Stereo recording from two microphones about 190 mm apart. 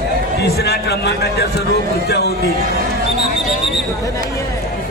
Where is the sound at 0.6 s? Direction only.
60° left (ahead or behind).